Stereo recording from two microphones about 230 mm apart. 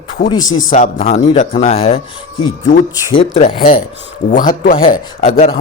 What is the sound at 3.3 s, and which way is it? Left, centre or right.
A man's voice, left.